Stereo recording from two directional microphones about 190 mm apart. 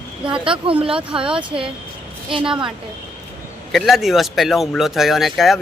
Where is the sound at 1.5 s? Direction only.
25° right (ahead or behind).